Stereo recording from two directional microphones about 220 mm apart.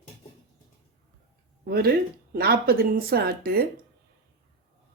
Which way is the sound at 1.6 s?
45° right (ahead or behind).